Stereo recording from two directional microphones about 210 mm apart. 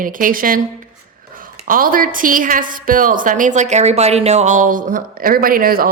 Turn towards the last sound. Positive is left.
turn(degrees=-45)  # may be behind; listen again after turning